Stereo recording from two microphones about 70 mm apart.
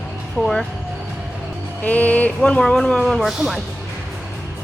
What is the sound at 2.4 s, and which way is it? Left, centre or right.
Speech, centre.